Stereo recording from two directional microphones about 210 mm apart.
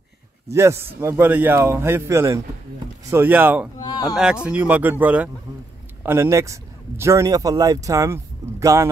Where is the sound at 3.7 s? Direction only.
15° left (ahead or behind).